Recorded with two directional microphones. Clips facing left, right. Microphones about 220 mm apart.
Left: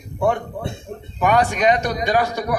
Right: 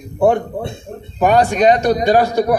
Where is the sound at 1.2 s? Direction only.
35° right (ahead or behind).